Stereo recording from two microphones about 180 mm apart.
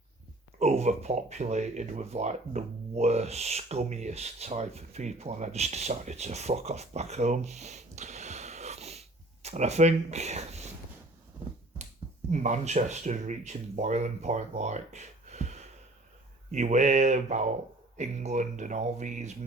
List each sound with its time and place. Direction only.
0.6 s speech: 40° right (ahead or behind)
12.3 s speech: 40° right (ahead or behind)